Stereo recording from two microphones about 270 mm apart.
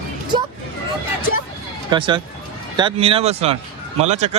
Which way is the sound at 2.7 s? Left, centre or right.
Centre.